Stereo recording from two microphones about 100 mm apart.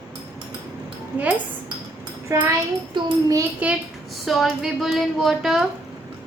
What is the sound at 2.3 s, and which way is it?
Speech, 30° right (ahead or behind).